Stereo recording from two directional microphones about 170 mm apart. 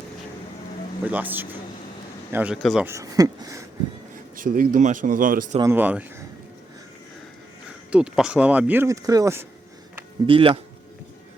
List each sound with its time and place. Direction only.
1.0 s speech: 10° right (ahead or behind)
2.8 s speech: 20° right (ahead or behind)
4.4 s speech: 55° right (ahead or behind)
5.7 s speech: 10° right (ahead or behind)
7.9 s speech: 5° right (ahead or behind)
10.2 s speech: 30° right (ahead or behind)